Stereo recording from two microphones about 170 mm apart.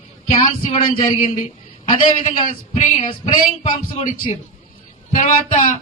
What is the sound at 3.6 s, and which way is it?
Speech, 40° left (ahead or behind).